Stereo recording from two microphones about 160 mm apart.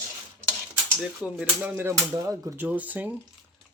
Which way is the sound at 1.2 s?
10° right (ahead or behind).